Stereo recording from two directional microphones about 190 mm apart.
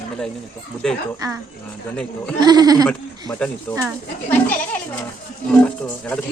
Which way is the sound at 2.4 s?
20° right (ahead or behind).